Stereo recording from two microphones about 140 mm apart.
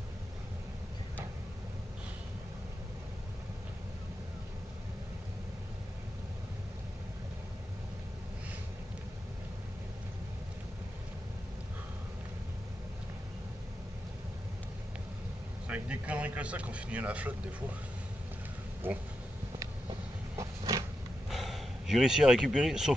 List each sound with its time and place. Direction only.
15.7 s speech: 10° right (ahead or behind)
18.8 s speech: 15° right (ahead or behind)
20.3 s a sound: 25° right (ahead or behind)
21.3 s speech: centre (ahead or behind)